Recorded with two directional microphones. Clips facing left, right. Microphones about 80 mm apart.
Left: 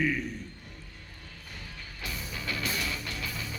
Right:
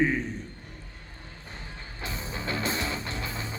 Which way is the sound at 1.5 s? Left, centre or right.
Right.